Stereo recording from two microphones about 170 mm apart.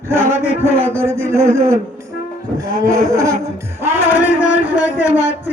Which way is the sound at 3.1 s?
20° right (ahead or behind).